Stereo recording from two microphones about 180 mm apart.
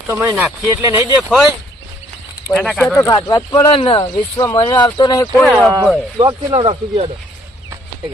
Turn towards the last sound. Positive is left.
turn(degrees=-35)  # may be behind; listen again after turning